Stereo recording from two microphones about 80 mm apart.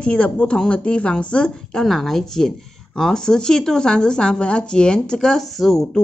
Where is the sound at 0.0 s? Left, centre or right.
Centre.